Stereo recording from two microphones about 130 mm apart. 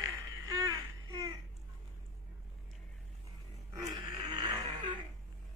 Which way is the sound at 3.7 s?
30° right (ahead or behind).